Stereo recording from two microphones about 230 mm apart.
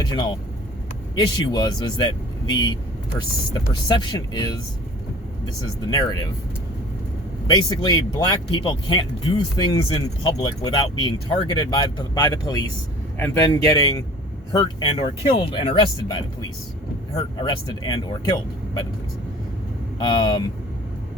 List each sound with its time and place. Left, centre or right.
0.1 s speech: centre
5.9 s speech: centre
7.4 s speech: centre
17.2 s speech: centre
20.0 s speech: centre